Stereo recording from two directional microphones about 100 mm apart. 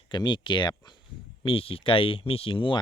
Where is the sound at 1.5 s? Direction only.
70° left (ahead or behind).